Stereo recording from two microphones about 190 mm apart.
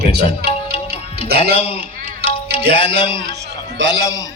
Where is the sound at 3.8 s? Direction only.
75° right (ahead or behind).